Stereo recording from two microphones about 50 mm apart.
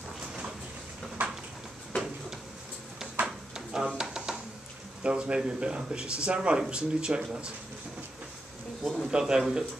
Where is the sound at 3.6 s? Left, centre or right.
Centre.